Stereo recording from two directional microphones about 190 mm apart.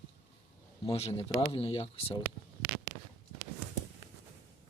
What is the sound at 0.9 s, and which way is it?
Speech, 30° left (ahead or behind).